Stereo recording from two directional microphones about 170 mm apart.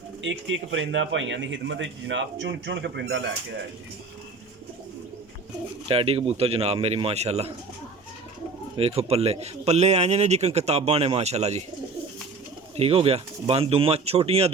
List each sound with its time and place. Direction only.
0.2 s a man's voice: 90° right
5.9 s a man's voice: 35° right (ahead or behind)
8.7 s a man's voice: 35° right (ahead or behind)
12.7 s a man's voice: 35° right (ahead or behind)